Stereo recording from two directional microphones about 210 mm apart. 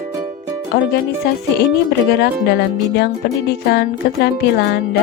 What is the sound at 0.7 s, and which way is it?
Speech, 50° left (ahead or behind).